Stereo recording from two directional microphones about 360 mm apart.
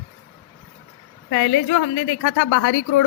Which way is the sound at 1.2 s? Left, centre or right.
Left.